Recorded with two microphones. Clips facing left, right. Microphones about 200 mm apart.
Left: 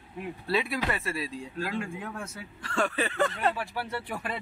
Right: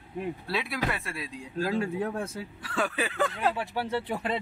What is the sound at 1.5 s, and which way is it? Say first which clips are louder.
Speech: right 6 dB; 40° right (ahead or behind).